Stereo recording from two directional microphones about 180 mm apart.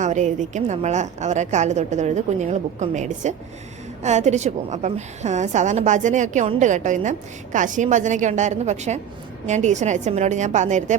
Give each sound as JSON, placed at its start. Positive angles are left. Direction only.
{"t": 0.0, "sound": "a woman's voice", "side_deg": -40}